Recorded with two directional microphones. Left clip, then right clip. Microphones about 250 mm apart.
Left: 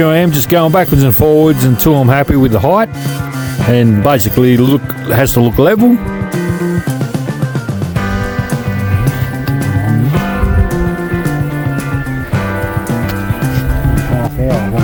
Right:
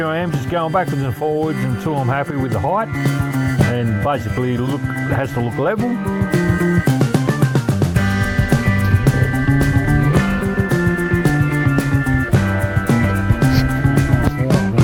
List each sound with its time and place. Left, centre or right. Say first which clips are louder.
0.0 s speech: left 9 dB; left